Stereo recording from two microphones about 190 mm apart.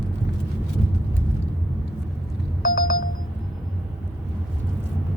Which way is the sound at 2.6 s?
50° left (ahead or behind).